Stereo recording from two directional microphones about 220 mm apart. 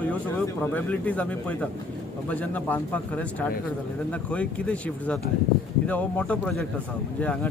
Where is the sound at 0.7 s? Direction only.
5° left (ahead or behind).